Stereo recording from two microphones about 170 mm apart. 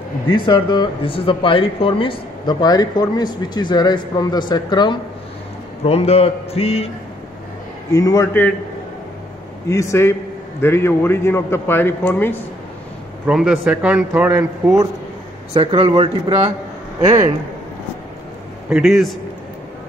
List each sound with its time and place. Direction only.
0.3 s speech: 25° left (ahead or behind)
5.9 s a man's voice: 35° left (ahead or behind)
7.9 s speech: 20° left (ahead or behind)
9.7 s a man's voice: 15° left (ahead or behind)
13.3 s a man's voice: 5° right (ahead or behind)
15.5 s a man's voice: 30° right (ahead or behind)
18.7 s a man's voice: centre (ahead or behind)